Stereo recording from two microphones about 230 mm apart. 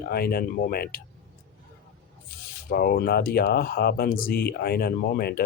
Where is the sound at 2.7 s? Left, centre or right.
Left.